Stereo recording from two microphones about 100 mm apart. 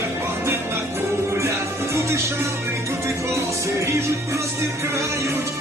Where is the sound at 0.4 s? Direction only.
25° right (ahead or behind).